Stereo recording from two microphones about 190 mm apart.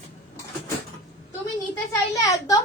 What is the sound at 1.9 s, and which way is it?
Speech, 15° left (ahead or behind).